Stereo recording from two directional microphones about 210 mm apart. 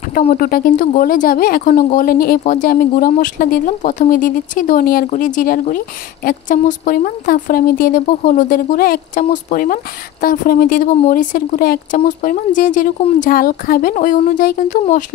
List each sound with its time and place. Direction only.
0.3 s speech: 45° left (ahead or behind)